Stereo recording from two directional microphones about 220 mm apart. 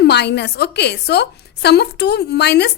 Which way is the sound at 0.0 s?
50° left (ahead or behind).